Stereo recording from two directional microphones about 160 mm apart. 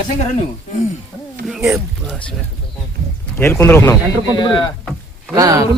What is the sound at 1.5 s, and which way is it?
Speech, 5° right (ahead or behind).